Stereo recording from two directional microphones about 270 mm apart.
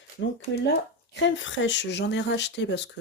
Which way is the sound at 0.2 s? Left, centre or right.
Left.